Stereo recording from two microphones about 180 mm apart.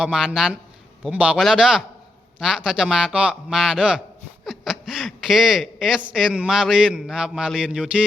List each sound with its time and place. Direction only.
0.0 s a man's voice: 5° right (ahead or behind)